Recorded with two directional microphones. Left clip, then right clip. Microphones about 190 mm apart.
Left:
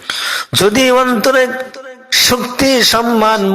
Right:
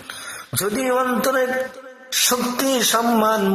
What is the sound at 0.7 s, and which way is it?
A man's voice, 30° left (ahead or behind).